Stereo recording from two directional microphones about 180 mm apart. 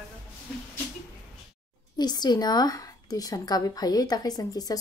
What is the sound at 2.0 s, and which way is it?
Speech, 25° left (ahead or behind).